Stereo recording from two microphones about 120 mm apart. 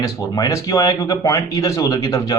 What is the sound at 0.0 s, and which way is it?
Speech, 30° left (ahead or behind).